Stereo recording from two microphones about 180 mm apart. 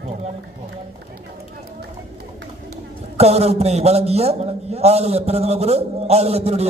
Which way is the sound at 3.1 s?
35° right (ahead or behind).